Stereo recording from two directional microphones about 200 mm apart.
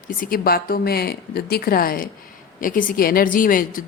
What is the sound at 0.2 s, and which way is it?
A woman's voice, 45° left (ahead or behind).